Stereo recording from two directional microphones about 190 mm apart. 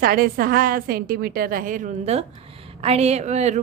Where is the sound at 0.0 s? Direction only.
50° right (ahead or behind).